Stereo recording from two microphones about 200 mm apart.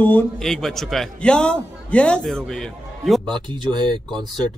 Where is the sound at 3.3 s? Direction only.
25° right (ahead or behind).